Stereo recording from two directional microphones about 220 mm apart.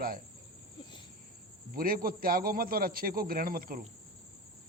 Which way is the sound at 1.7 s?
40° right (ahead or behind).